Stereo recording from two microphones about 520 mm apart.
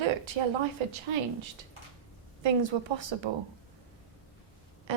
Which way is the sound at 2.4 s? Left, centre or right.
Right.